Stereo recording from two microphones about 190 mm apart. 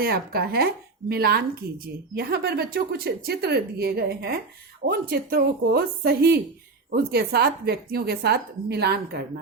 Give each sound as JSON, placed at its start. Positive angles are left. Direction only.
{"t": 0.0, "sound": "speech", "side_deg": -55}